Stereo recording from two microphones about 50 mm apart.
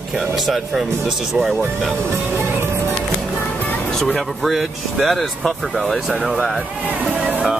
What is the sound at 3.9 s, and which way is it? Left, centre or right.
Speech, centre.